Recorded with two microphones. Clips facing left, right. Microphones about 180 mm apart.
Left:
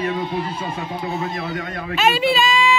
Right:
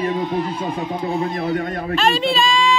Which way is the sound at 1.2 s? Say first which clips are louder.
Right 5 dB; 35° right (ahead or behind).